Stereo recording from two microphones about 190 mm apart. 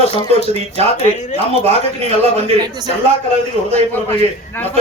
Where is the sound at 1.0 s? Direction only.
35° left (ahead or behind).